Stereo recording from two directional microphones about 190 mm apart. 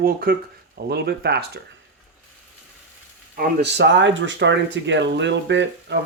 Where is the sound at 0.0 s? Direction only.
50° right (ahead or behind).